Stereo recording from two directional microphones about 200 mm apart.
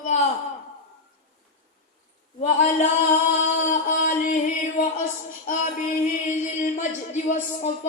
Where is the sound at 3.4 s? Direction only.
40° left (ahead or behind).